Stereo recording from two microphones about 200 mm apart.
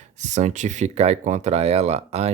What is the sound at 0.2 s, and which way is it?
Speech, 35° right (ahead or behind).